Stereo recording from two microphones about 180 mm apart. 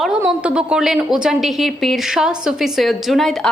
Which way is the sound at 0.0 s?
5° right (ahead or behind).